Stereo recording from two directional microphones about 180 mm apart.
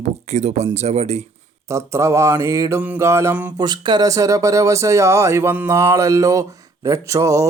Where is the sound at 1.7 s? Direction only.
15° right (ahead or behind).